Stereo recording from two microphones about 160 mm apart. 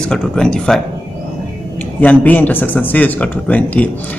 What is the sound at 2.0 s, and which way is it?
A man's voice, 10° left (ahead or behind).